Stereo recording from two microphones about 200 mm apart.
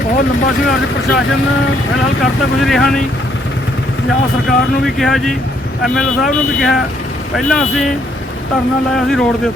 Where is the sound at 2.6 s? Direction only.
Centre (ahead or behind).